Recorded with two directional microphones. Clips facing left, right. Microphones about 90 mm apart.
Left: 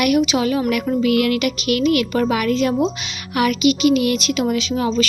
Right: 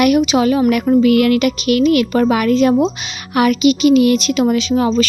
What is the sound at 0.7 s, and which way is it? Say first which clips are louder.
Speech: right 6 dB; 40° right (ahead or behind).